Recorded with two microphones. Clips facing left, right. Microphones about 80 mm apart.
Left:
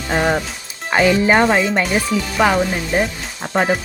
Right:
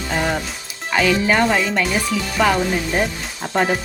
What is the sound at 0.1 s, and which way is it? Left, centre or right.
Music, left.